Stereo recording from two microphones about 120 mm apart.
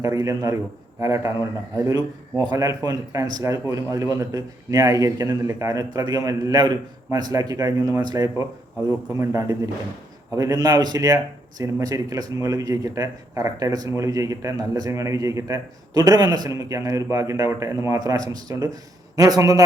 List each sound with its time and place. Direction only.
0.0 s speech: 25° right (ahead or behind)